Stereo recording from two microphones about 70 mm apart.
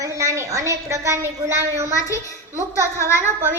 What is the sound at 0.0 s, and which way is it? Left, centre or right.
A woman's voice, right.